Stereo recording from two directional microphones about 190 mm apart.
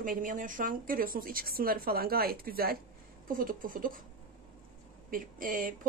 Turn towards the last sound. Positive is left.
turn(degrees=-45)  # may be behind; listen again after turning